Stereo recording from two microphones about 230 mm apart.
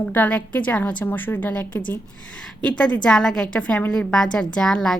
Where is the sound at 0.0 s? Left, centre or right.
Centre.